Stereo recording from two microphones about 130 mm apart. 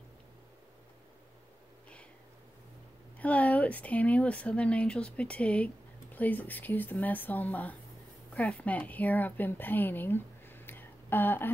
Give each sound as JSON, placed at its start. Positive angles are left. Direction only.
{"t": 3.2, "sound": "a woman's voice", "side_deg": 10}